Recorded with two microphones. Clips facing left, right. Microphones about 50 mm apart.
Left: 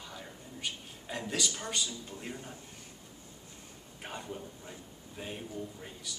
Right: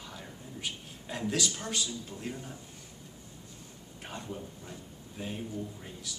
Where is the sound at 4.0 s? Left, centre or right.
Centre.